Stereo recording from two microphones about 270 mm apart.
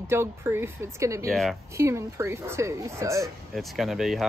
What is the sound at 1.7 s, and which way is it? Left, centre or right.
A woman's voice, centre.